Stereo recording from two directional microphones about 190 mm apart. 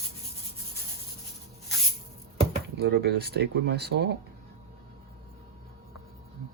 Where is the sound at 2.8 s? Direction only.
60° right (ahead or behind).